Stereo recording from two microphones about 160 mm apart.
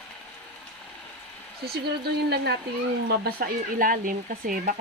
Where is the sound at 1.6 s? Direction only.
80° right.